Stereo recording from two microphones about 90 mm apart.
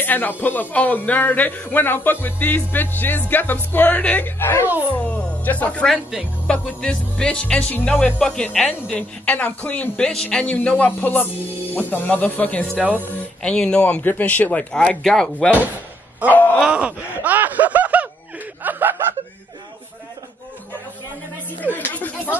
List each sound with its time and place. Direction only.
0.0 s a man's voice: 20° left (ahead or behind)
12.7 s speech: 15° right (ahead or behind)
13.4 s speech: 10° left (ahead or behind)
16.3 s a man's voice: 20° left (ahead or behind)
16.6 s speech: 15° right (ahead or behind)
21.6 s a man's voice: 20° left (ahead or behind)